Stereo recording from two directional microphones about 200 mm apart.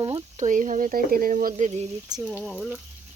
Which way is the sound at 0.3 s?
40° right (ahead or behind).